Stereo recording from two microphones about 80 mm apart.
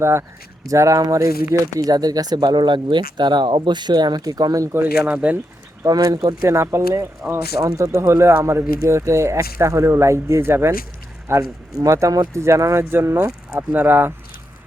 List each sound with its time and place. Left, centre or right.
0.0 s speech: right
0.7 s speech: right
1.9 s speech: right
5.1 s speech: centre
5.9 s speech: right
6.4 s speech: right
8.8 s speech: right
11.3 s speech: right